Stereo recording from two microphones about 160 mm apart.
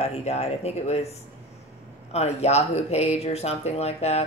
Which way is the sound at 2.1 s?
40° left (ahead or behind).